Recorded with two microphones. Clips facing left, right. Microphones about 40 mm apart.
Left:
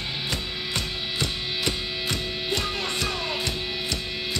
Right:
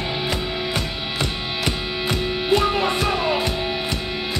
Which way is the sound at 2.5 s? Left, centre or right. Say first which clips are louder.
Right 10 dB; centre.